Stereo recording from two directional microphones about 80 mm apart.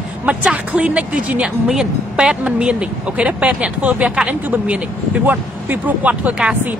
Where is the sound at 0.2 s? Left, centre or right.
Centre.